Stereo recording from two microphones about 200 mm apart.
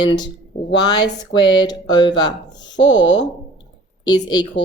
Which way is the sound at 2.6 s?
65° left (ahead or behind).